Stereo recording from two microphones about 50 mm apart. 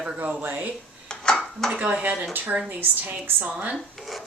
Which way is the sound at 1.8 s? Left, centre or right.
Right.